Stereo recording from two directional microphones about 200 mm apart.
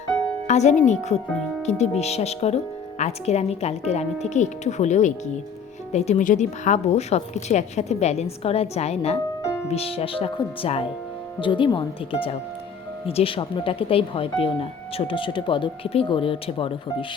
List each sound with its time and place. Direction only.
0.4 s music: 35° left (ahead or behind)
0.9 s a woman's voice: 35° left (ahead or behind)